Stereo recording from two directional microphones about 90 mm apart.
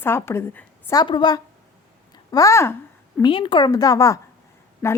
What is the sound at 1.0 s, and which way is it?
Speech, 55° left (ahead or behind).